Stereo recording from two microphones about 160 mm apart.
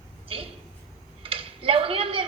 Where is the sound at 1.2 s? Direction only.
35° right (ahead or behind).